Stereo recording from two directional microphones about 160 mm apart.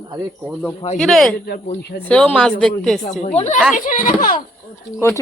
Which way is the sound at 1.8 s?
90° left.